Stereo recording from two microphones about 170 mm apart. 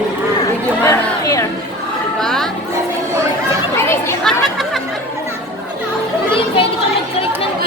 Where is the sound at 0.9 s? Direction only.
20° left (ahead or behind).